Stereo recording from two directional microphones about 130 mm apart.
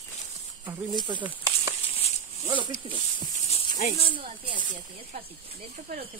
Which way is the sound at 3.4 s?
55° left (ahead or behind).